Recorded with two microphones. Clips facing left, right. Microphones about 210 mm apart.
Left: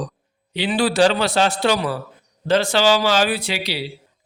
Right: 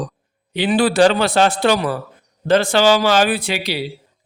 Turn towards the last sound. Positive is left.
turn(degrees=-50)  # may be behind; listen again after turning